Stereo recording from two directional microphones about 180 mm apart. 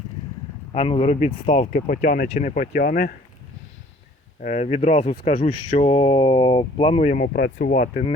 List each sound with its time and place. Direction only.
0.7 s speech: 35° left (ahead or behind)
1.7 s speech: 50° left (ahead or behind)
4.4 s speech: 40° left (ahead or behind)
7.1 s speech: 55° left (ahead or behind)
7.7 s speech: 40° left (ahead or behind)